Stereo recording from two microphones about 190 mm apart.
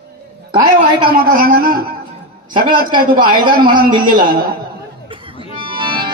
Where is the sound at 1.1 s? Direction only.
50° right (ahead or behind).